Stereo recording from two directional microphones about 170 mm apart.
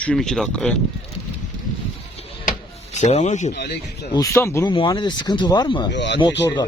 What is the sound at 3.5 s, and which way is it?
Speech, 75° left (ahead or behind).